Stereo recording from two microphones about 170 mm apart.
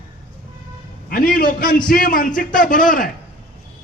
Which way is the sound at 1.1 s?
60° left (ahead or behind).